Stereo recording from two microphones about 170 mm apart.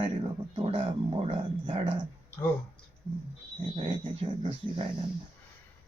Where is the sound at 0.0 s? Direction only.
30° right (ahead or behind).